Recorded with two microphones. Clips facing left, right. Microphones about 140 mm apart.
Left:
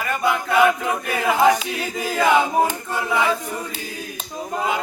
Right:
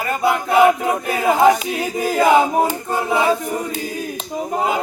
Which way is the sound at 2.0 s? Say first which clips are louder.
Right 4 dB; 40° right (ahead or behind).